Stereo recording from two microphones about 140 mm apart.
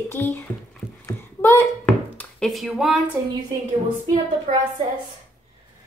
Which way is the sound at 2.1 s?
5° left (ahead or behind).